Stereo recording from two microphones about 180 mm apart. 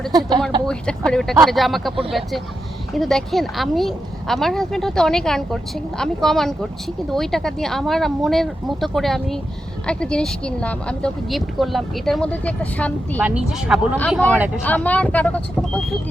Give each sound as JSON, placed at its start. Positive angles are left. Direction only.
{"t": 0.1, "sound": "speech", "side_deg": -25}
{"t": 0.7, "sound": "a woman's voice", "side_deg": 5}
{"t": 13.1, "sound": "a woman's voice", "side_deg": -5}
{"t": 14.6, "sound": "speech", "side_deg": 10}